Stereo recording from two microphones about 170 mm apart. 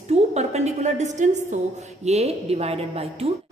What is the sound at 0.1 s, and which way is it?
A woman's voice, 40° right (ahead or behind).